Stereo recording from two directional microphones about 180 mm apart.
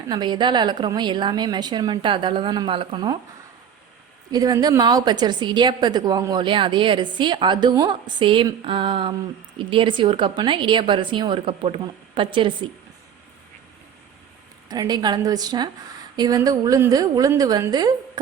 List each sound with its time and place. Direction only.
0.1 s a woman's voice: 25° right (ahead or behind)
4.3 s a woman's voice: 20° right (ahead or behind)
14.7 s a woman's voice: 20° right (ahead or behind)